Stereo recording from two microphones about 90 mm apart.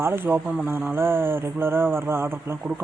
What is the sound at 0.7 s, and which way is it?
Speech, 25° right (ahead or behind).